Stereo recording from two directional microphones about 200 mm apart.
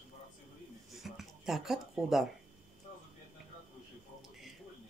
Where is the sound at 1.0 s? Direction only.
Centre (ahead or behind).